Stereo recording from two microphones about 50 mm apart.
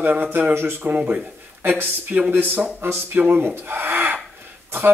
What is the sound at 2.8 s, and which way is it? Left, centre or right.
A man's voice, right.